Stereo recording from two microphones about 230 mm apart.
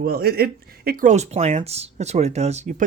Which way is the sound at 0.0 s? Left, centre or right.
Right.